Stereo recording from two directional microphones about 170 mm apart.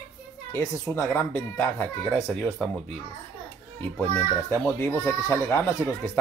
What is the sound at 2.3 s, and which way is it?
Speech, centre (ahead or behind).